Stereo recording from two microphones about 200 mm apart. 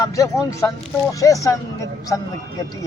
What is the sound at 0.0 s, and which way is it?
Speech, 15° left (ahead or behind).